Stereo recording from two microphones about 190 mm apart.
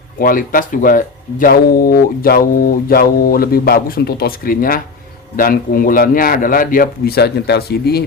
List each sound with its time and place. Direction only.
0.2 s speech: 45° left (ahead or behind)